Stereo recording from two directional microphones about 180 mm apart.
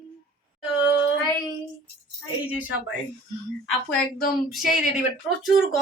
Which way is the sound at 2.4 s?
10° right (ahead or behind).